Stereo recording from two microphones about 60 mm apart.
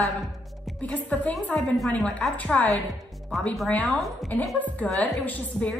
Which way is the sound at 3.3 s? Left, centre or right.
Centre.